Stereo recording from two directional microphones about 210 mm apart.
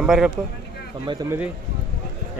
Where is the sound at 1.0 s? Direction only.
20° right (ahead or behind).